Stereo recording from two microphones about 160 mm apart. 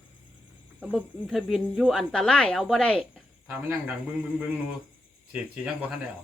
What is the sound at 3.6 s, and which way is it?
Speech, 10° right (ahead or behind).